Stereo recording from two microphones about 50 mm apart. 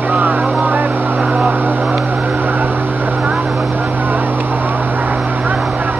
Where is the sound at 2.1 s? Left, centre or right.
Right.